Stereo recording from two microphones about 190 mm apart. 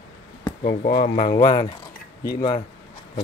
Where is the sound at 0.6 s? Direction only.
55° left (ahead or behind).